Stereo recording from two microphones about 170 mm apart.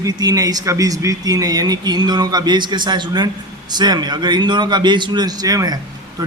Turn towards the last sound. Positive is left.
turn(degrees=-20)  # may be behind; listen again after turning